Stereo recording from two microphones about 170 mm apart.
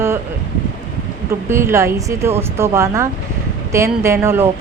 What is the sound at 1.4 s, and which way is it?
Speech, 15° right (ahead or behind).